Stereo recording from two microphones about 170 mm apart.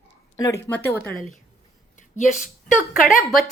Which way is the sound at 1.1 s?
Centre (ahead or behind).